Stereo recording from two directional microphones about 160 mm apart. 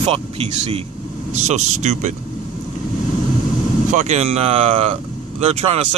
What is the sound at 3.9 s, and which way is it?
Speech, 45° right (ahead or behind).